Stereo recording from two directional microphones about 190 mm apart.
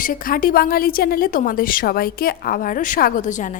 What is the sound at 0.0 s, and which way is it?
A woman's voice, 45° left (ahead or behind).